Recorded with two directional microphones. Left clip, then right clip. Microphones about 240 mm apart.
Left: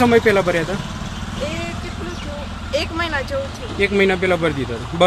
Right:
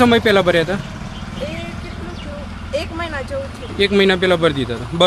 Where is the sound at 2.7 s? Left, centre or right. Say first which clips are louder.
Left 2 dB; centre.